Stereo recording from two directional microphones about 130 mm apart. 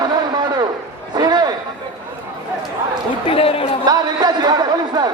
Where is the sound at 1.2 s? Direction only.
30° right (ahead or behind).